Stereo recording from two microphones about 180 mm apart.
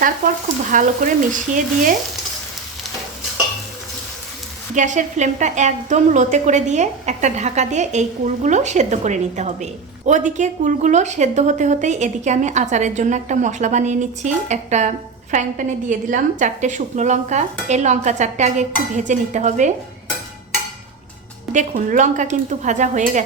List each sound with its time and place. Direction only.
0.7 s speech: 45° right (ahead or behind)
4.7 s a woman's voice: 45° right (ahead or behind)
21.5 s speech: 45° right (ahead or behind)